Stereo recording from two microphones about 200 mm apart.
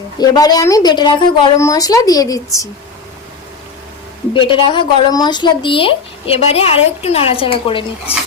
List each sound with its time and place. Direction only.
0.2 s speech: 20° left (ahead or behind)
4.4 s speech: 25° left (ahead or behind)